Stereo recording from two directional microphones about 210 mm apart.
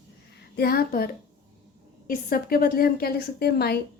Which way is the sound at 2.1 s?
45° left (ahead or behind).